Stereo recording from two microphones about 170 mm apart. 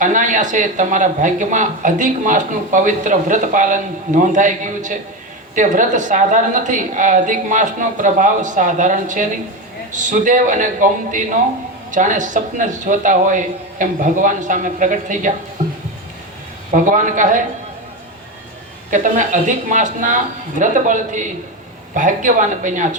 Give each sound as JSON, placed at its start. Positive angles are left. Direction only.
{"t": 0.0, "sound": "speech", "side_deg": -50}
{"t": 16.7, "sound": "speech", "side_deg": -50}
{"t": 18.9, "sound": "speech", "side_deg": -45}